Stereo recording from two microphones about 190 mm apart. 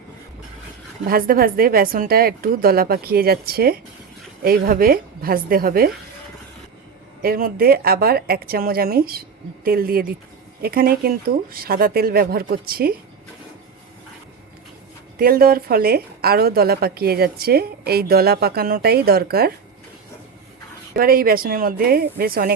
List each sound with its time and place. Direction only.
1.0 s a woman's voice: 50° right (ahead or behind)
7.2 s a woman's voice: 50° right (ahead or behind)
15.2 s a woman's voice: 50° right (ahead or behind)
20.9 s a woman's voice: 50° right (ahead or behind)